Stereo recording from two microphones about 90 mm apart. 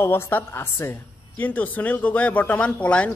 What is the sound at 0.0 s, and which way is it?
A man's voice, 25° left (ahead or behind).